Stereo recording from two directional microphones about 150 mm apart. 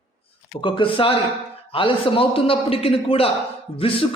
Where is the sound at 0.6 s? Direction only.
35° left (ahead or behind).